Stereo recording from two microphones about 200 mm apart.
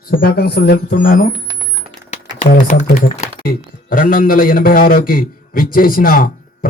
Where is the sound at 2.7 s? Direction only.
35° left (ahead or behind).